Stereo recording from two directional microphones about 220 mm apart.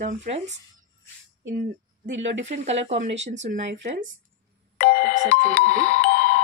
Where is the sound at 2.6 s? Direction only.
30° right (ahead or behind).